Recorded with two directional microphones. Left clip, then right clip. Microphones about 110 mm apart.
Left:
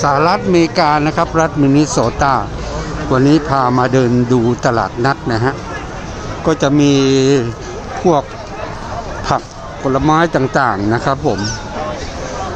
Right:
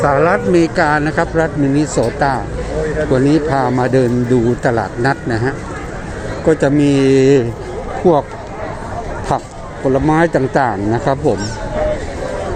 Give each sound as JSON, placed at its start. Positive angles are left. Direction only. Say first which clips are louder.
{"t": 0.2, "sound": "speech", "louder": "even", "side_deg": 30}
{"t": 0.8, "sound": "speech", "louder": "left 1 dB", "side_deg": 15}
{"t": 8.0, "sound": "speech", "louder": "right 1 dB", "side_deg": 20}
{"t": 9.3, "sound": "speech", "louder": "left 2 dB", "side_deg": 5}